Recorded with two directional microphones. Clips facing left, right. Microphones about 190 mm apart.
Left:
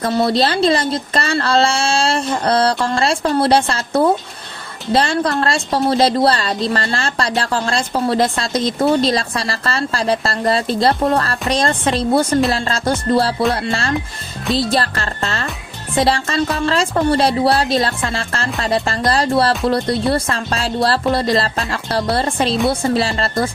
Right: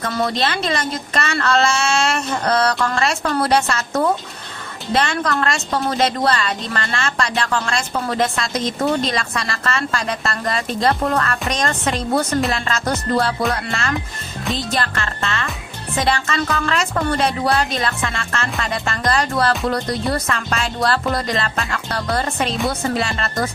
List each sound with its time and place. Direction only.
0.0 s a woman's voice: 35° left (ahead or behind)